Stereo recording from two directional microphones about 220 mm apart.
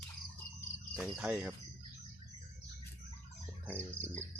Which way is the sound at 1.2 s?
5° right (ahead or behind).